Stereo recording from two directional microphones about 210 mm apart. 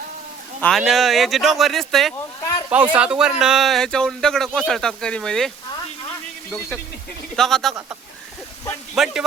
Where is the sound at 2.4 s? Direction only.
15° left (ahead or behind).